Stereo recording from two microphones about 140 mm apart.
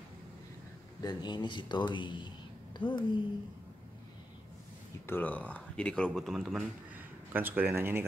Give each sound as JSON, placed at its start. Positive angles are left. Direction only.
{"t": 1.0, "sound": "a woman's voice", "side_deg": 30}
{"t": 5.0, "sound": "speech", "side_deg": 15}
{"t": 7.3, "sound": "speech", "side_deg": -15}